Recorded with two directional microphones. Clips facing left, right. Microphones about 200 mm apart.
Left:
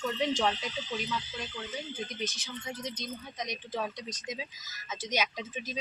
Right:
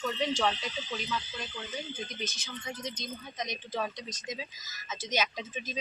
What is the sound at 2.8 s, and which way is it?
Speech, 10° left (ahead or behind).